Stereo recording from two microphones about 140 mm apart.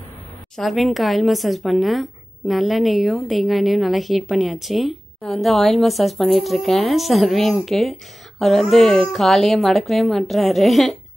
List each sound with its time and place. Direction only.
0.6 s a woman's voice: centre (ahead or behind)